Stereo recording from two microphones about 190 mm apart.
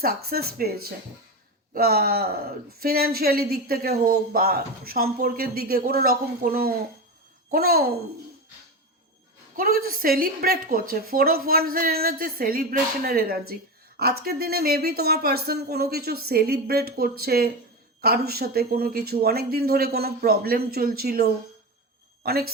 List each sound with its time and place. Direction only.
0.0 s speech: 55° right (ahead or behind)
1.7 s speech: 55° right (ahead or behind)
9.6 s a woman's voice: 50° right (ahead or behind)